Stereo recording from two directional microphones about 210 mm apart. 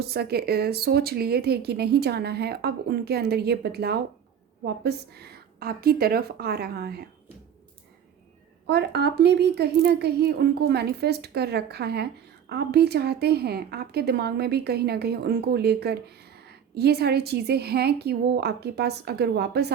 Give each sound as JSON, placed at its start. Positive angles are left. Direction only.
{"t": 0.0, "sound": "a woman's voice", "side_deg": -50}
{"t": 8.6, "sound": "a woman's voice", "side_deg": -50}